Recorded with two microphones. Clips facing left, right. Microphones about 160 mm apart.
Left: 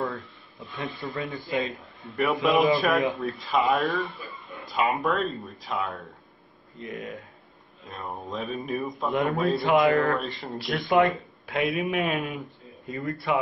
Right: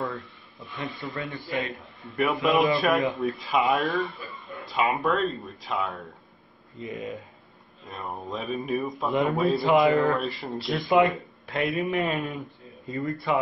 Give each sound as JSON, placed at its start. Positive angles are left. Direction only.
{"t": 1.2, "sound": "speech", "side_deg": 20}
{"t": 1.8, "sound": "a man's voice", "side_deg": 0}